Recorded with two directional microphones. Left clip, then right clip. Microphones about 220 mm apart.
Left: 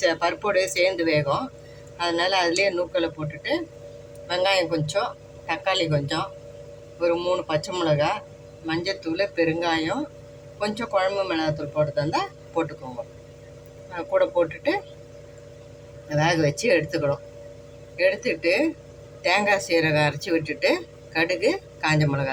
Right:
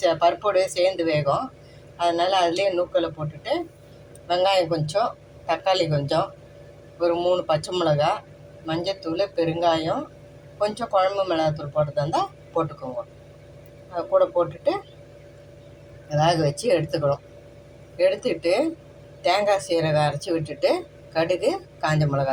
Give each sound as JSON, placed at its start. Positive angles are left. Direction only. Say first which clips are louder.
{"t": 0.0, "sound": "speech", "louder": "right 3 dB", "side_deg": 10}
{"t": 13.9, "sound": "speech", "louder": "right 2 dB", "side_deg": 15}
{"t": 16.0, "sound": "speech", "louder": "right 1 dB", "side_deg": 10}